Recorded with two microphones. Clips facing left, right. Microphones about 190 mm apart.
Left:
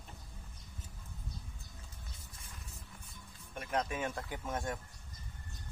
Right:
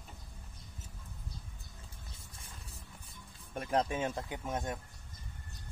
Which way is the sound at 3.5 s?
30° right (ahead or behind).